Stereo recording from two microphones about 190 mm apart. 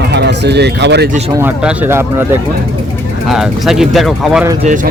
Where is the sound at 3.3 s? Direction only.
Centre (ahead or behind).